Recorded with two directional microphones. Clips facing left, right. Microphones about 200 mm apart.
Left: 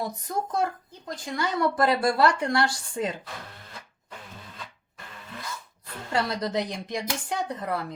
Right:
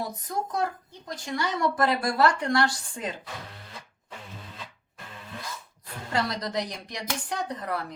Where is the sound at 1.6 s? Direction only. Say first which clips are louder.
Left 3 dB; 25° left (ahead or behind).